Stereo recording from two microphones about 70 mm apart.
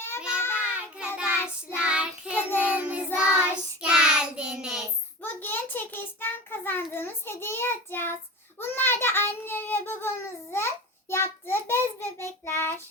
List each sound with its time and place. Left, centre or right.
0.3 s child singing: left
0.6 s child singing: centre
2.3 s child singing: left
2.6 s child singing: centre
5.2 s child singing: left
8.5 s a child's voice: left
11.1 s child singing: left